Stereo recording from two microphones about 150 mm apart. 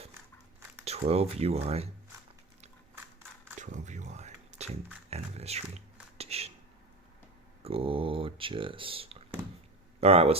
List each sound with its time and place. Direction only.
0.9 s speech: 45° right (ahead or behind)
3.6 s music: 55° right (ahead or behind)
7.6 s speech: 40° right (ahead or behind)